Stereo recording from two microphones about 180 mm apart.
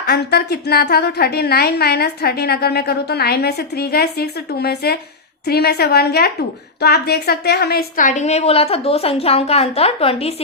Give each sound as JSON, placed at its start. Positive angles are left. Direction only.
{"t": 0.0, "sound": "a woman's voice", "side_deg": 60}